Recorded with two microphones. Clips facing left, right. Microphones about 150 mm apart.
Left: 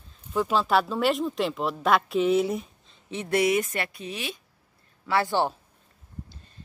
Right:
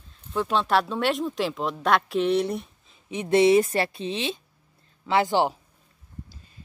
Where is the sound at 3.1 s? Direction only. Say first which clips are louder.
Right 5 dB; 20° right (ahead or behind).